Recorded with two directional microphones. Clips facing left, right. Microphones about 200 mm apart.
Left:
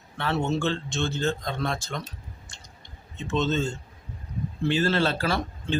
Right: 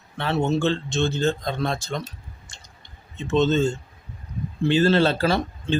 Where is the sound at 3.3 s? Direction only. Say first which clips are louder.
Right 6 dB; 35° right (ahead or behind).